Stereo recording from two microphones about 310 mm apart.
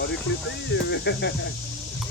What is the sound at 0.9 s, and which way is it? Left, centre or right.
Speech, left.